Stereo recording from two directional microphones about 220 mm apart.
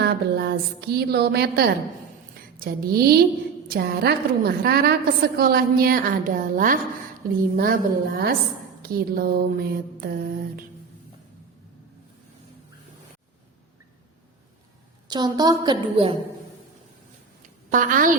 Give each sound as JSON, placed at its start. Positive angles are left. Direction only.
{"t": 0.0, "sound": "a woman's voice", "side_deg": -45}
{"t": 15.0, "sound": "a woman's voice", "side_deg": -20}
{"t": 17.7, "sound": "a woman's voice", "side_deg": -35}